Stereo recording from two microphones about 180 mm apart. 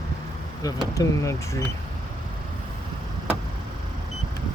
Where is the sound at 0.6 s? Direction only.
20° left (ahead or behind).